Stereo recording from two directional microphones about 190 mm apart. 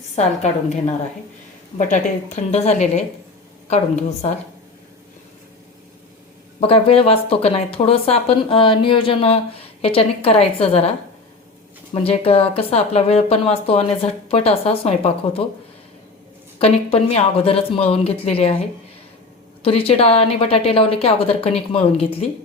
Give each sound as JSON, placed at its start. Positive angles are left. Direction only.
{"t": 0.2, "sound": "a woman's voice", "side_deg": 35}
{"t": 6.6, "sound": "speech", "side_deg": 30}
{"t": 11.9, "sound": "a woman's voice", "side_deg": 30}
{"t": 16.6, "sound": "a woman's voice", "side_deg": 30}
{"t": 19.6, "sound": "a woman's voice", "side_deg": 30}